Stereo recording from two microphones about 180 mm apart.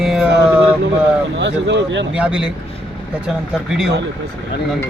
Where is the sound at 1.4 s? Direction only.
80° right.